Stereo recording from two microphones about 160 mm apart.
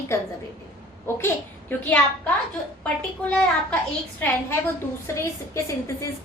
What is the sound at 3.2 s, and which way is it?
A woman's voice, 5° left (ahead or behind).